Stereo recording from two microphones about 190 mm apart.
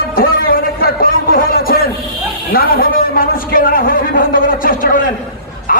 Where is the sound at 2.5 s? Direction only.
50° left (ahead or behind).